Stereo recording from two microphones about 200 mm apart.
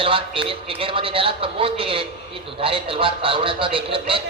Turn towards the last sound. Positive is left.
turn(degrees=-25)  # may be behind; listen again after turning